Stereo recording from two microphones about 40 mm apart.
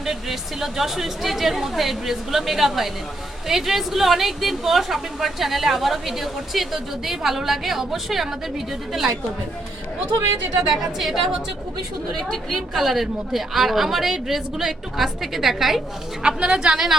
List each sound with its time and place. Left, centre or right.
0.0 s a woman's voice: centre
10.9 s a woman's voice: centre
16.2 s a woman's voice: right
16.7 s a woman's voice: centre